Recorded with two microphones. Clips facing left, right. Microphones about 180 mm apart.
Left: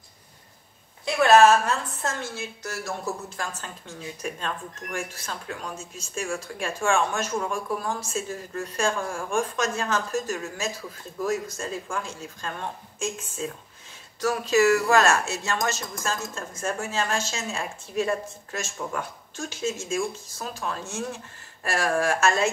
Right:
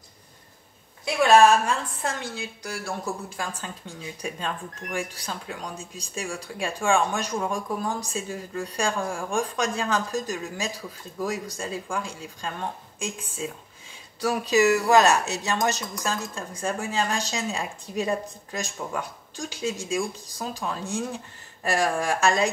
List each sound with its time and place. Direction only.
1.0 s speech: 10° right (ahead or behind)